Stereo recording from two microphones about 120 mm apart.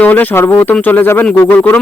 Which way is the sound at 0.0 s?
15° left (ahead or behind).